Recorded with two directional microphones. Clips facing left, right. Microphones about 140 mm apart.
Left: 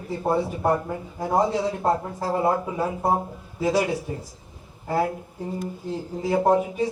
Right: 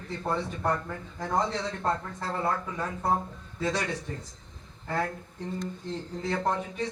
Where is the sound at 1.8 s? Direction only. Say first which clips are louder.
Left 7 dB; 25° left (ahead or behind).